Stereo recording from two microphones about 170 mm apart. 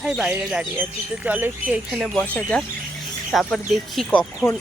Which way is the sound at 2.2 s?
10° left (ahead or behind).